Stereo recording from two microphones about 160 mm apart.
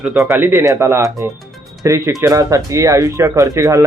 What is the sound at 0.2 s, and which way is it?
Speech, 15° right (ahead or behind).